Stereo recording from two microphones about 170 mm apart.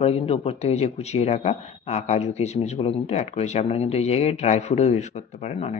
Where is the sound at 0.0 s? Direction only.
35° left (ahead or behind).